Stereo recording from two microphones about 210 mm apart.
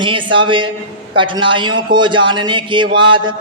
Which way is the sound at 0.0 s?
25° right (ahead or behind).